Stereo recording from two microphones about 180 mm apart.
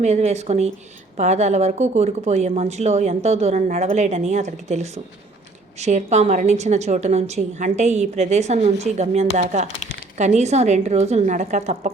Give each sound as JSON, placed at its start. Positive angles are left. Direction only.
{"t": 0.0, "sound": "a woman's voice", "side_deg": -40}